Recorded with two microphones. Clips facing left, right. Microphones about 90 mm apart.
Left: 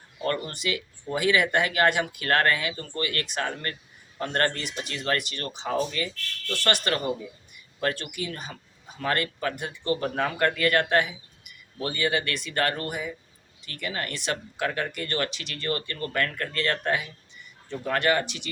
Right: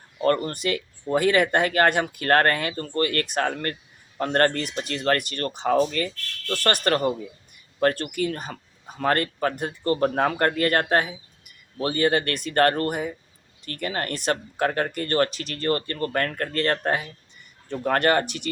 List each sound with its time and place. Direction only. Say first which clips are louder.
0.2 s speech: right 7 dB; 40° right (ahead or behind)
17.7 s speech: right 4 dB; 50° right (ahead or behind)